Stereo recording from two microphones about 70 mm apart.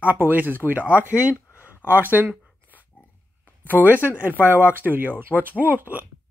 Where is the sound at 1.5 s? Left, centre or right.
Left.